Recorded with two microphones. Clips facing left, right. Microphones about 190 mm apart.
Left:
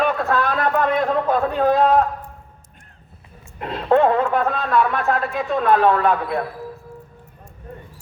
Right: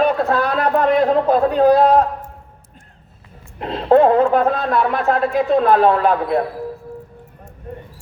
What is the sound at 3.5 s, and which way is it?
A man's voice, 30° right (ahead or behind).